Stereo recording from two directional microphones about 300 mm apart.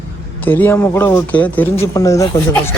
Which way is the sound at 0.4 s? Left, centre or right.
Centre.